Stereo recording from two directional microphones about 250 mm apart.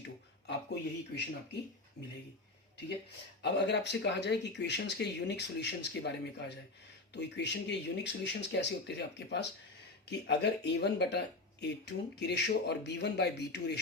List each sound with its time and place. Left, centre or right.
0.4 s speech: left
3.4 s speech: left